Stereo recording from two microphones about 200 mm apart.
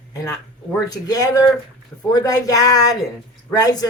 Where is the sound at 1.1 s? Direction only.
20° left (ahead or behind).